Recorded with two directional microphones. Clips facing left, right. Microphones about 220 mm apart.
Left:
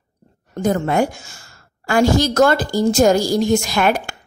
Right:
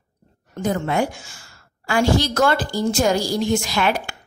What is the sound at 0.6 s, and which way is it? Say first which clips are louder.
A woman's voice: left 4 dB; 45° left (ahead or behind).